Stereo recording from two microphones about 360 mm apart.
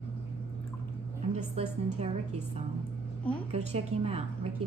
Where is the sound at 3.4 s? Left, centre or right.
Centre.